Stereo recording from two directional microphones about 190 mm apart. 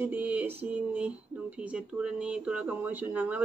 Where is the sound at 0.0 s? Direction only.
10° right (ahead or behind).